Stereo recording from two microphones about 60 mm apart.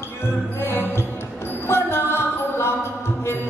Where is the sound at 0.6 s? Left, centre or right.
Left.